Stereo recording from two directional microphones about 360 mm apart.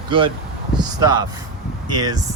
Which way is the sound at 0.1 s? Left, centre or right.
Centre.